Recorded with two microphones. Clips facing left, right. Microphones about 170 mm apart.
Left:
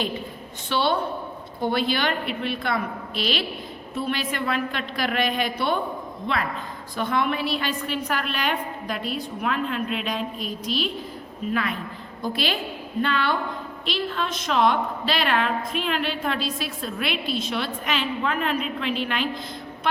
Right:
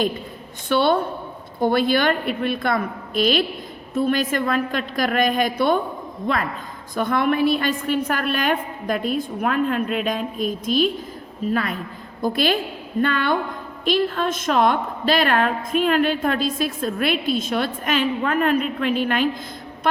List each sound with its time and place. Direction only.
0.7 s a woman's voice: 55° right (ahead or behind)